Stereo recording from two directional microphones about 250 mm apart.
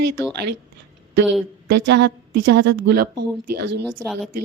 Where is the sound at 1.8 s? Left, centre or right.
Right.